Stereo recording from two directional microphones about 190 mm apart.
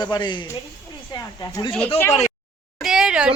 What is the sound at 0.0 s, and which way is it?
A woman's voice, 25° left (ahead or behind).